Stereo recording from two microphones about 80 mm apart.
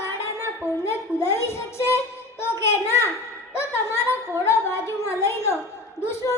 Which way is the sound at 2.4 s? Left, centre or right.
Left.